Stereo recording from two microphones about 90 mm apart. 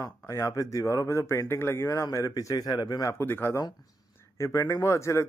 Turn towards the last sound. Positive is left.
turn(degrees=35)  # may be behind; listen again after turning